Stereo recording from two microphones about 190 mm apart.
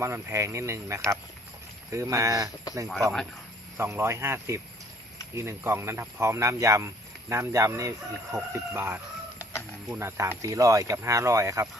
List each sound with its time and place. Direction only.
0.0 s speech: 15° right (ahead or behind)
2.8 s speech: centre (ahead or behind)
3.8 s speech: 15° right (ahead or behind)
9.4 s bird: 15° left (ahead or behind)
9.9 s speech: 15° right (ahead or behind)